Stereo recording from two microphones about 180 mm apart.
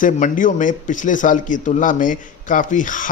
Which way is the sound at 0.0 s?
50° left (ahead or behind).